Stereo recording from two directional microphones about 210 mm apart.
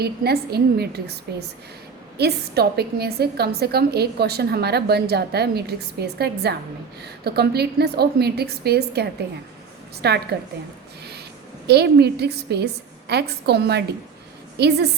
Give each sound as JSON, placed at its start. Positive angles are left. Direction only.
{"t": 0.0, "sound": "a woman's voice", "side_deg": -50}
{"t": 11.6, "sound": "a woman's voice", "side_deg": -50}